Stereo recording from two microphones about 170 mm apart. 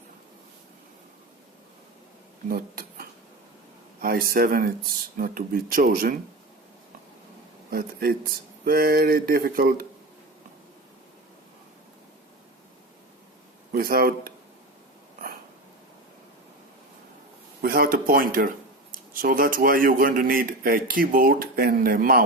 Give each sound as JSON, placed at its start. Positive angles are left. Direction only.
{"t": 2.5, "sound": "speech", "side_deg": -60}
{"t": 7.7, "sound": "speech", "side_deg": -65}
{"t": 13.7, "sound": "speech", "side_deg": -60}
{"t": 17.6, "sound": "speech", "side_deg": -60}